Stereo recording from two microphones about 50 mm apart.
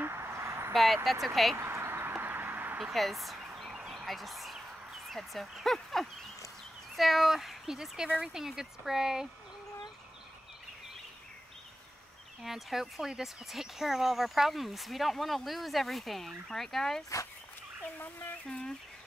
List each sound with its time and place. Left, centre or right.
0.0 s a sound: right
1.2 s speech: centre
1.6 s a sound: right
2.9 s speech: centre
3.9 s a sound: centre
5.0 s speech: centre
12.4 s speech: centre
17.9 s speech: left
18.5 s speech: centre